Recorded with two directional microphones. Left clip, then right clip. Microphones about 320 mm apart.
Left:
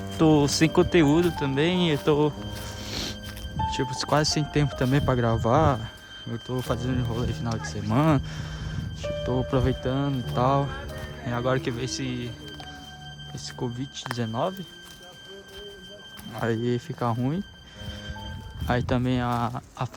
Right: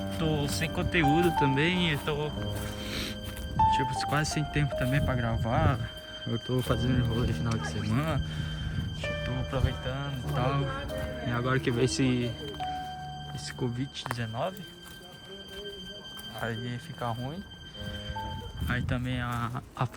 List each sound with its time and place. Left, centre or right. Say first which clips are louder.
0.1 s music: left 12 dB; centre
0.4 s speech: left 10 dB; centre
2.8 s music: left 4 dB; centre
3.7 s speech: left 1 dB; centre
8.7 s music: left 4 dB; centre
9.6 s speech: left 8 dB; centre
16.5 s speech: left 10 dB; centre
18.7 s speech: left 8 dB; centre